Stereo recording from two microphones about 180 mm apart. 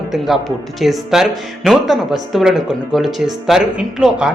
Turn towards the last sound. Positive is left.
turn(degrees=-5)  # may be behind; listen again after turning